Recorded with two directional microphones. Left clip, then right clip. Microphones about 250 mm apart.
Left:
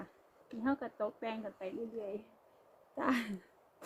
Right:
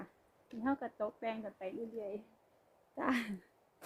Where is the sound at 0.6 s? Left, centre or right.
Centre.